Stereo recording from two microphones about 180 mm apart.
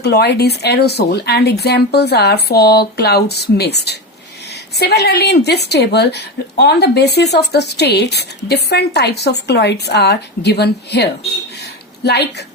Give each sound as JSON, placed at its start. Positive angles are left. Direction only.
{"t": 0.0, "sound": "a woman's voice", "side_deg": 65}